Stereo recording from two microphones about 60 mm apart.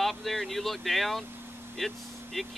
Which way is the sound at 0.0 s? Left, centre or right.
Centre.